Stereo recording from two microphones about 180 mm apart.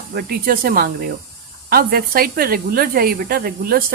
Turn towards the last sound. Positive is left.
turn(degrees=-55)  # may be behind; listen again after turning